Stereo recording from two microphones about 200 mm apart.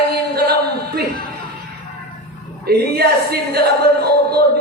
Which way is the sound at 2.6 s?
50° right (ahead or behind).